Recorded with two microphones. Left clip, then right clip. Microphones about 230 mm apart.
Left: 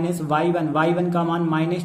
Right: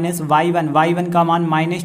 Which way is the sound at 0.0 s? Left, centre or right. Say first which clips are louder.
Right 5 dB; right.